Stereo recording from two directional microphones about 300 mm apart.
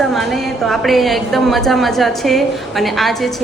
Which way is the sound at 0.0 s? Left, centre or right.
Centre.